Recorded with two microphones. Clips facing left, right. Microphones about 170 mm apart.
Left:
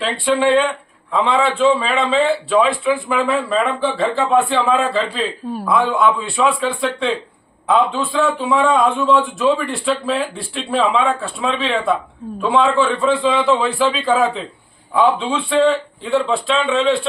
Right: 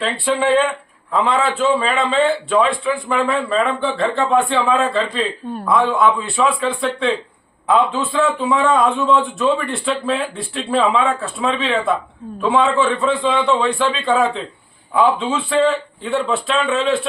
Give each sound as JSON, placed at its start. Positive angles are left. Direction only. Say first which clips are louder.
{"t": 0.0, "sound": "a man's voice", "louder": "left 2 dB", "side_deg": 0}